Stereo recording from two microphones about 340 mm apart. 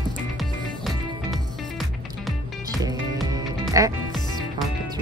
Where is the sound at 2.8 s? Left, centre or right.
Centre.